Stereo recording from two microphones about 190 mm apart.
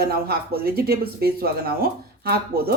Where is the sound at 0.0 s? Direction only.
55° right (ahead or behind).